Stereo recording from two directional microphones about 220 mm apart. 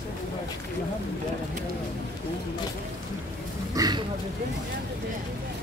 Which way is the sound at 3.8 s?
20° right (ahead or behind).